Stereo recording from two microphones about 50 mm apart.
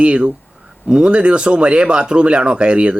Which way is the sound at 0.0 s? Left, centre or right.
Right.